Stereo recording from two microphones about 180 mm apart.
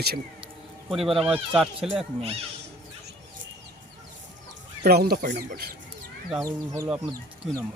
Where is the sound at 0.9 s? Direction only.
Centre (ahead or behind).